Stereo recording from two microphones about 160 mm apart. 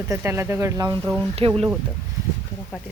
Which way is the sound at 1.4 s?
35° right (ahead or behind).